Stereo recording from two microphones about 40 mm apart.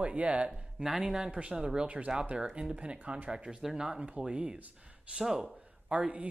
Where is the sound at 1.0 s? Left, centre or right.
Centre.